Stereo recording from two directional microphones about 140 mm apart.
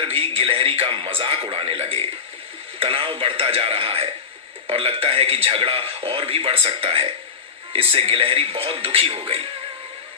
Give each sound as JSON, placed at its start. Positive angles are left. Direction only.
{"t": 0.0, "sound": "a man's voice", "side_deg": -45}